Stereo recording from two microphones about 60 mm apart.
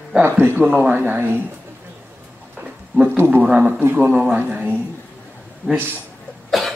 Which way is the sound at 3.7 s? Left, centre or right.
Right.